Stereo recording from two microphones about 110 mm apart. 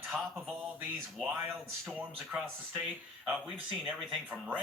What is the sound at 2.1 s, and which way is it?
A man's voice, 5° right (ahead or behind).